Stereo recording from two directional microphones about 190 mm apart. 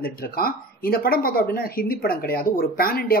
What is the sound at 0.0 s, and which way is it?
Speech, 50° left (ahead or behind).